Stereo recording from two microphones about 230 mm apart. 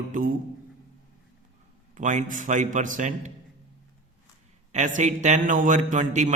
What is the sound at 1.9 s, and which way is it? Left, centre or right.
A man's voice, right.